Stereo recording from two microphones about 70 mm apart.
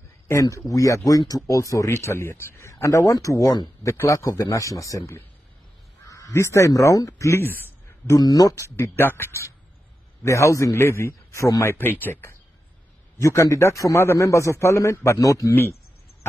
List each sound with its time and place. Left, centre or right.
0.3 s a man's voice: left
1.9 s a man's voice: left
7.4 s a sound: left
8.2 s speech: left
8.5 s a man's voice: left
11.6 s speech: left
13.2 s a man's voice: left